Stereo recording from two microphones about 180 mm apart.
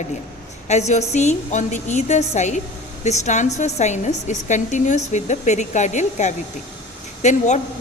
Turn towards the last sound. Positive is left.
turn(degrees=40)  # may be behind; listen again after turning